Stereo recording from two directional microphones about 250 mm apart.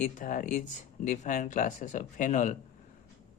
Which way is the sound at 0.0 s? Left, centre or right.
Left.